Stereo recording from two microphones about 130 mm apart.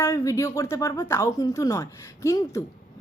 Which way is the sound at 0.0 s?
20° left (ahead or behind).